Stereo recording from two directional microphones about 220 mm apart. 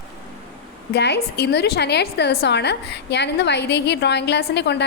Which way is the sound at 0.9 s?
50° left (ahead or behind).